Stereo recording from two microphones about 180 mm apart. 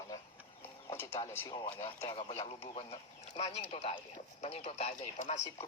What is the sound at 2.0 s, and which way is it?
Speech, 30° left (ahead or behind).